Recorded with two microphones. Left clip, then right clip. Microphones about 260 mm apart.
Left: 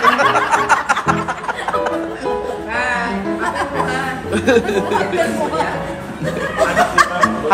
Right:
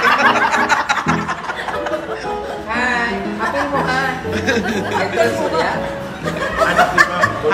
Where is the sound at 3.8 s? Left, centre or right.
Centre.